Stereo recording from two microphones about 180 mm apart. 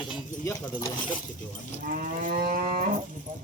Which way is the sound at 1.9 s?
45° right (ahead or behind).